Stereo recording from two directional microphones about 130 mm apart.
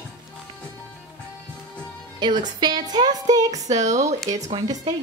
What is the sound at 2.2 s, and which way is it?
A woman's voice, 35° right (ahead or behind).